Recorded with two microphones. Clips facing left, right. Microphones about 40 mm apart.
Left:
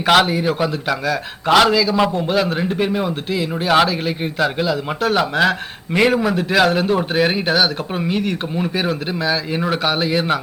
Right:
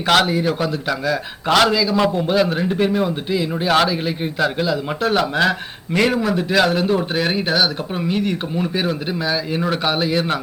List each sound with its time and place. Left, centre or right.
0.0 s a man's voice: centre